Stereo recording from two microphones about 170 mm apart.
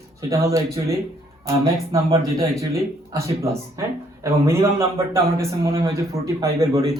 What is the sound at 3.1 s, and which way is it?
A man's voice, 15° right (ahead or behind).